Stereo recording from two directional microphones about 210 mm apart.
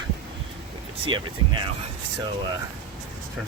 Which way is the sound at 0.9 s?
25° right (ahead or behind).